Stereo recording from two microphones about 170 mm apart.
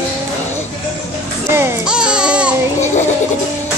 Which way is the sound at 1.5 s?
15° right (ahead or behind).